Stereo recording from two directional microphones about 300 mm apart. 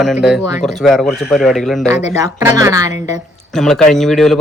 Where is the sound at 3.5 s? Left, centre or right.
Centre.